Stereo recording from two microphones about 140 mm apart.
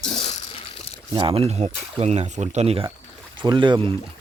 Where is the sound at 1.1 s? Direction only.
40° right (ahead or behind).